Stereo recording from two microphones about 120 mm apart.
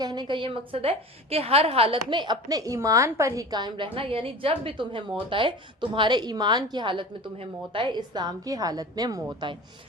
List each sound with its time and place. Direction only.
0.0 s a woman's voice: 35° right (ahead or behind)
3.9 s a woman's voice: 50° right (ahead or behind)